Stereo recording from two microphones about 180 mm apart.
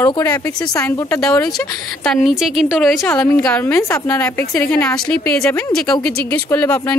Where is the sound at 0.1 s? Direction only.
20° left (ahead or behind).